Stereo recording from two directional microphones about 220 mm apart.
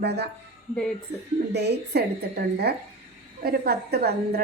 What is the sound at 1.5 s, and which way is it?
A woman's voice, 50° right (ahead or behind).